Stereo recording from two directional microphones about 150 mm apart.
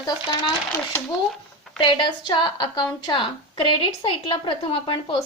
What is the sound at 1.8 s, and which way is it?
A woman's voice, 30° left (ahead or behind).